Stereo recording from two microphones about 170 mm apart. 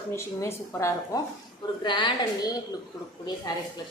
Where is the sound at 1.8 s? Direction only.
25° left (ahead or behind).